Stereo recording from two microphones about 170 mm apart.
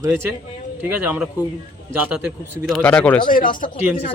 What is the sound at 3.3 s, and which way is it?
Speech, 55° left (ahead or behind).